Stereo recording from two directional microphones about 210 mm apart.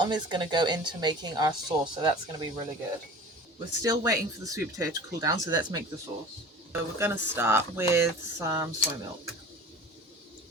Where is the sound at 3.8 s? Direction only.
15° right (ahead or behind).